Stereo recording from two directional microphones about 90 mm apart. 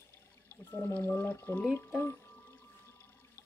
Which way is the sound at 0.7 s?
25° left (ahead or behind).